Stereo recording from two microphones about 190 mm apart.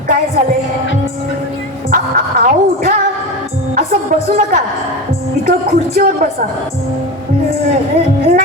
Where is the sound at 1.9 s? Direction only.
50° right (ahead or behind).